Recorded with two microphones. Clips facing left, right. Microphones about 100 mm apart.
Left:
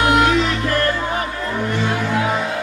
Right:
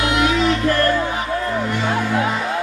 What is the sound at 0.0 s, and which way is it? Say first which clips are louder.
Music: left 3 dB; 50° left (ahead or behind).